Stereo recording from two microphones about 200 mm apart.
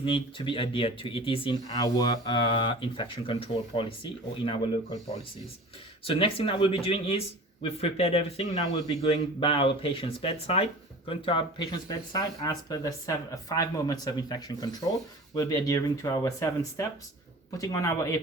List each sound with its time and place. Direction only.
0.0 s speech: 25° left (ahead or behind)
6.1 s speech: 25° left (ahead or behind)